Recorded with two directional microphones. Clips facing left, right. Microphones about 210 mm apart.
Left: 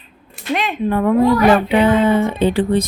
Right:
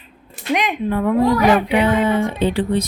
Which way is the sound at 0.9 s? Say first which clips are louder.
Left 4 dB; 55° left (ahead or behind).